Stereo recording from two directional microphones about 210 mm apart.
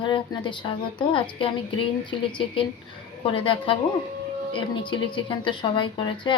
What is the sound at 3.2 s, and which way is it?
A woman's voice, 25° left (ahead or behind).